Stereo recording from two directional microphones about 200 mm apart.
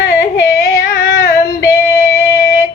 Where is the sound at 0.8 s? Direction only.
40° left (ahead or behind).